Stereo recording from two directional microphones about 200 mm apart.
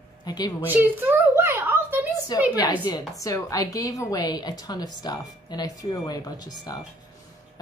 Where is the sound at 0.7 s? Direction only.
10° right (ahead or behind).